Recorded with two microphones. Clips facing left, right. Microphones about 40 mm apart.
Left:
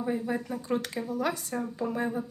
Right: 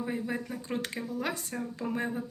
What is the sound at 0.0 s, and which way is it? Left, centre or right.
A woman's voice, right.